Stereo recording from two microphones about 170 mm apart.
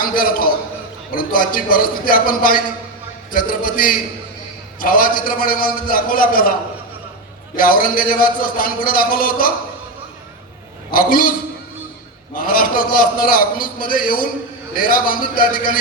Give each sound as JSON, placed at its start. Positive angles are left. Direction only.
{"t": 0.0, "sound": "a man's voice", "side_deg": 55}
{"t": 7.5, "sound": "a man's voice", "side_deg": 55}
{"t": 10.9, "sound": "a man's voice", "side_deg": 55}